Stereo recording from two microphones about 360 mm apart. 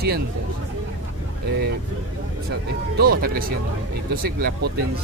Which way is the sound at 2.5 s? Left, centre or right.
Right.